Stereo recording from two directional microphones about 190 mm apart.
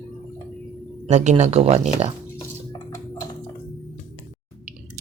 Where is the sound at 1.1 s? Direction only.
40° right (ahead or behind).